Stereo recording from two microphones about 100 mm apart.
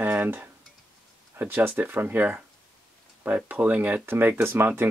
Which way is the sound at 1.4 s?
20° right (ahead or behind).